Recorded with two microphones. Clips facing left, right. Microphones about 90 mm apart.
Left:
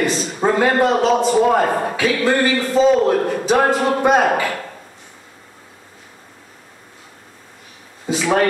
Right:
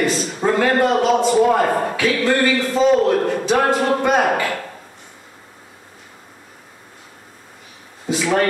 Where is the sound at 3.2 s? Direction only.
5° left (ahead or behind).